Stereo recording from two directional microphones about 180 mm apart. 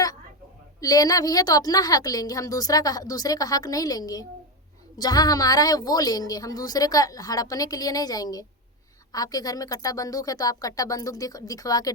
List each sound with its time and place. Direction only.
0.8 s a woman's voice: 20° left (ahead or behind)